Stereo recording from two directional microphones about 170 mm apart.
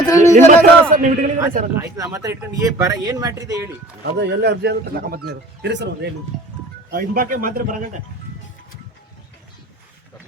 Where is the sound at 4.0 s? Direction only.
80° right.